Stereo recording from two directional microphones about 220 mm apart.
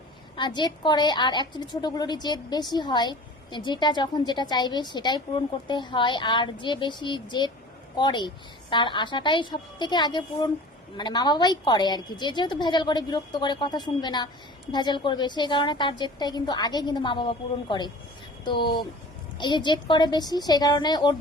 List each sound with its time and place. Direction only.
0.3 s a woman's voice: 20° left (ahead or behind)